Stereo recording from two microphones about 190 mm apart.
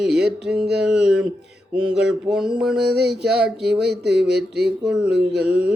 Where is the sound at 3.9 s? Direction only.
60° right (ahead or behind).